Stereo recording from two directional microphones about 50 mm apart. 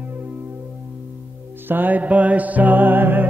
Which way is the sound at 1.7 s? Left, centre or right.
Right.